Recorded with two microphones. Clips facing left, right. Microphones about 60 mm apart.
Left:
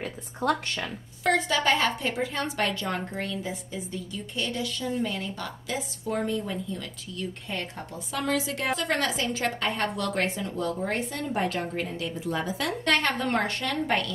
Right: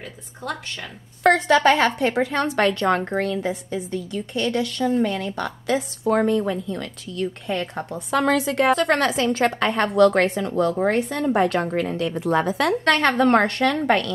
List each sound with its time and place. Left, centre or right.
0.0 s a woman's voice: left
1.2 s a woman's voice: right